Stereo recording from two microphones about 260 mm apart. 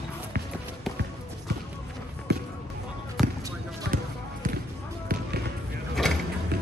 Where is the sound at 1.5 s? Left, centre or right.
Right.